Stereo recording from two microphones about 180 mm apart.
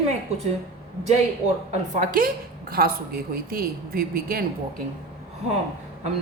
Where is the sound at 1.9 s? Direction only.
50° right (ahead or behind).